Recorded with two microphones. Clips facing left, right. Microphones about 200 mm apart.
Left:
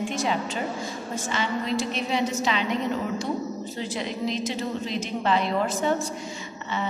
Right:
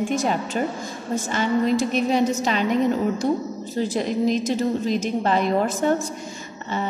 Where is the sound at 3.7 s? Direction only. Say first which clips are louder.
Right 10 dB; 45° right (ahead or behind).